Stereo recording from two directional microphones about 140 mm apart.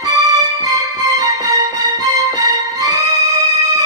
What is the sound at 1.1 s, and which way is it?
Music, 25° right (ahead or behind).